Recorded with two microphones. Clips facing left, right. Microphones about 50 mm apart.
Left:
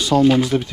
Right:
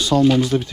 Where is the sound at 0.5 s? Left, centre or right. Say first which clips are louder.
Even; left.